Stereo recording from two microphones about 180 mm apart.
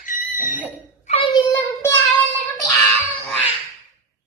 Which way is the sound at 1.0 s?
30° left (ahead or behind).